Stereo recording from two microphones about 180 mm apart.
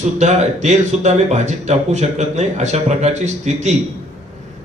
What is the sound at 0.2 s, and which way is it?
A man's voice, 40° right (ahead or behind).